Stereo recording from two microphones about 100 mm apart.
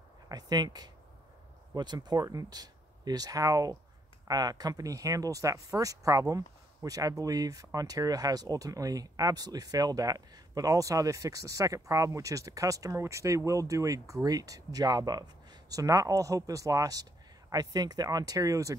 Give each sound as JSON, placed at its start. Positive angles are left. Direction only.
{"t": 0.3, "sound": "speech", "side_deg": -40}